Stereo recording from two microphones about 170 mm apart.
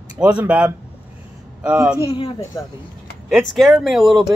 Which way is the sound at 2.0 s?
35° left (ahead or behind).